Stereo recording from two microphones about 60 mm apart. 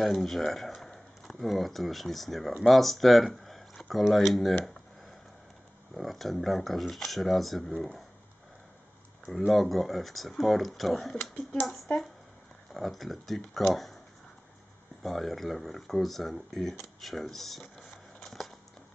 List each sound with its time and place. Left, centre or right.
0.0 s speech: centre
5.9 s speech: centre
9.5 s speech: centre
15.0 s speech: centre
18.2 s a sound: centre